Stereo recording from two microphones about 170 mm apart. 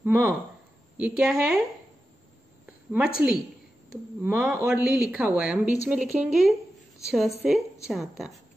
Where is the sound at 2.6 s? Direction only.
10° right (ahead or behind).